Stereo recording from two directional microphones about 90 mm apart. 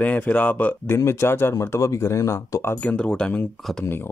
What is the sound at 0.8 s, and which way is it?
Speech, 30° left (ahead or behind).